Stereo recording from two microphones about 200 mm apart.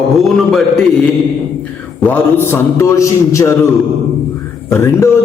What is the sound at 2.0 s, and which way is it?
A man's voice, 10° left (ahead or behind).